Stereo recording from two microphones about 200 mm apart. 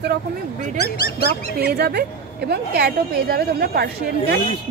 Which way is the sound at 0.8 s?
50° left (ahead or behind).